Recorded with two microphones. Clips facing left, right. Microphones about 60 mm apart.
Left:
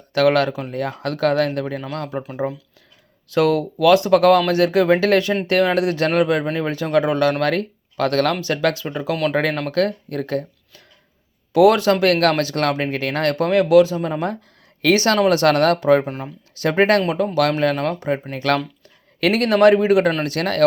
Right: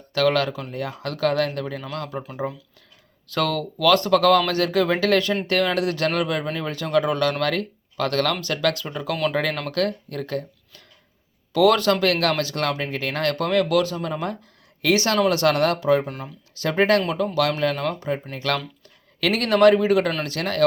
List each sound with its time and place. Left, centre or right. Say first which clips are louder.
0.1 s speech: left 4 dB; left
0.7 s speech: left 5 dB; left
3.3 s speech: left 7 dB; centre
9.3 s speech: left 4 dB; left
11.5 s speech: left 4 dB; left
11.9 s speech: left 4 dB; left
12.6 s speech: left 4 dB; left
13.3 s speech: left 8 dB; left
14.8 s speech: left 4 dB; left
19.5 s speech: left 2 dB; left
20.4 s speech: left 3 dB; left